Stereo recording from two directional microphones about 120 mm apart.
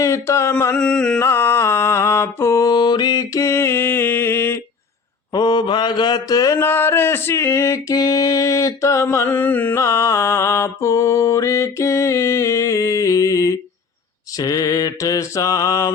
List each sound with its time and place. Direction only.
0.0 s male singing: 25° left (ahead or behind)
0.8 s music: 5° left (ahead or behind)
1.2 s mantra: 20° left (ahead or behind)
5.3 s mantra: 35° left (ahead or behind)
6.6 s male singing: 20° left (ahead or behind)